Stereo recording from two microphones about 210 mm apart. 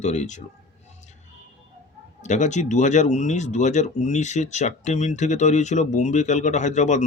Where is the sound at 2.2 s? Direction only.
35° left (ahead or behind).